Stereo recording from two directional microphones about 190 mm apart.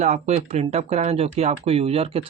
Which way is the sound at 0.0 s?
35° right (ahead or behind).